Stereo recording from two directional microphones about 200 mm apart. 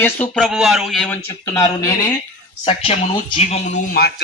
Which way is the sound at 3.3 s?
30° left (ahead or behind).